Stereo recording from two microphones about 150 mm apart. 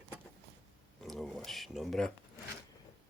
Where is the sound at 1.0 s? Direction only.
Centre (ahead or behind).